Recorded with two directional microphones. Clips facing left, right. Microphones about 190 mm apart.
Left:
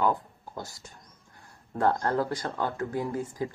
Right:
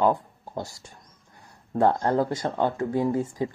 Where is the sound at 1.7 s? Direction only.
20° right (ahead or behind).